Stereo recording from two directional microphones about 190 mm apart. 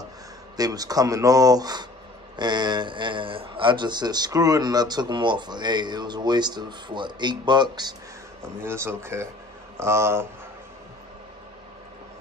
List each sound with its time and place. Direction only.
0.6 s a man's voice: 20° right (ahead or behind)